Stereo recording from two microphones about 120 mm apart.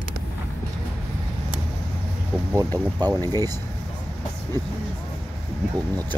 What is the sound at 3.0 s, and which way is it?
Speech, 30° right (ahead or behind).